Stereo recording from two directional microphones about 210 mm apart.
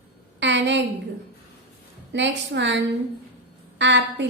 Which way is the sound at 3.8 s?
55° right (ahead or behind).